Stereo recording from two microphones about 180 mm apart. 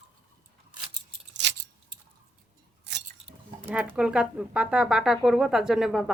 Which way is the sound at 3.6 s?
10° right (ahead or behind).